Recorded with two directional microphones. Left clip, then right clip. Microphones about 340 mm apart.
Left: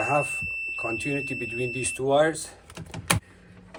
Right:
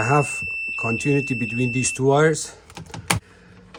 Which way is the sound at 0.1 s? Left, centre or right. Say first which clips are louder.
Right 4 dB; right.